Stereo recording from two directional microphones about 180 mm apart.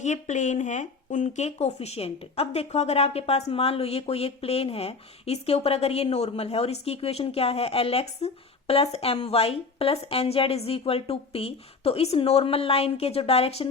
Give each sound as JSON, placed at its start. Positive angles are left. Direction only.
{"t": 0.0, "sound": "speech", "side_deg": 40}